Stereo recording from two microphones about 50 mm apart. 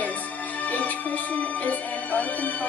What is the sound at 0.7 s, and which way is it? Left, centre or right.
Music, left.